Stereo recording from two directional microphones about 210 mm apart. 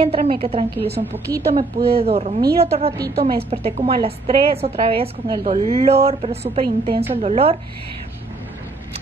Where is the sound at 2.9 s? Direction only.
50° right (ahead or behind).